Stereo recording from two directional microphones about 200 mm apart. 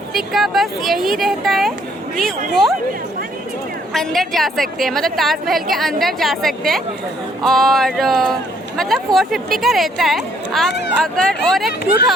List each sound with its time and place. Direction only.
0.1 s a woman's voice: centre (ahead or behind)
3.9 s a woman's voice: centre (ahead or behind)
10.7 s speech: 60° left (ahead or behind)
10.9 s a woman's voice: 5° left (ahead or behind)